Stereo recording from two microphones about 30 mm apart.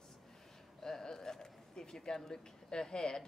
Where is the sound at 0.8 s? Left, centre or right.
Centre.